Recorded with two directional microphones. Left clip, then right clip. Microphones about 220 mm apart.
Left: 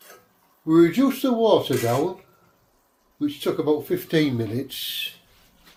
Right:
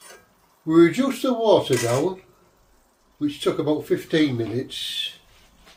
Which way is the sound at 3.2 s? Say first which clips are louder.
Right 1 dB; 30° left (ahead or behind).